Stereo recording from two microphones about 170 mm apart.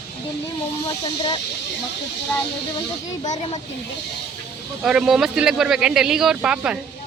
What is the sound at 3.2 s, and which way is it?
Speech, 45° left (ahead or behind).